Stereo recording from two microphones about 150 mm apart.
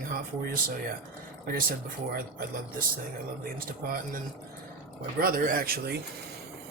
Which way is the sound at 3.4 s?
75° right (ahead or behind).